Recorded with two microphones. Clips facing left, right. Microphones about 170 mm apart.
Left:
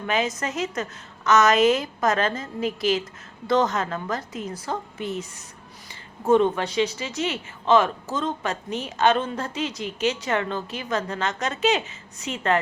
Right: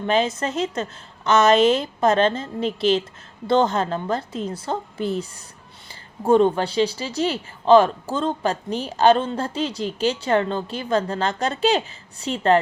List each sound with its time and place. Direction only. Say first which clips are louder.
0.0 s a woman's voice: right 4 dB; 30° right (ahead or behind)